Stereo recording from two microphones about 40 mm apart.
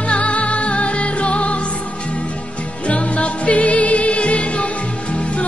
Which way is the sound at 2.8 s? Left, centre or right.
Left.